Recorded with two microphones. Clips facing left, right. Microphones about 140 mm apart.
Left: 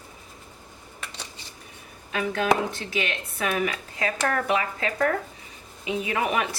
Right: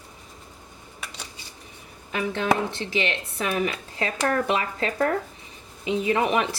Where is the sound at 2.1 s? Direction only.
25° right (ahead or behind).